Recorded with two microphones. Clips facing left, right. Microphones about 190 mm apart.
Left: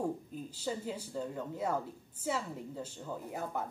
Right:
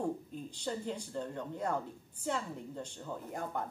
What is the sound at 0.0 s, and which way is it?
A woman's voice, 5° left (ahead or behind).